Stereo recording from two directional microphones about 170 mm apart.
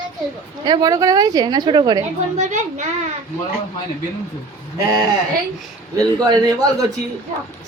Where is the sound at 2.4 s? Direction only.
45° right (ahead or behind).